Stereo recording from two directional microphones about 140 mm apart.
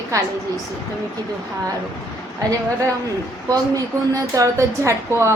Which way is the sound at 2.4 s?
25° right (ahead or behind).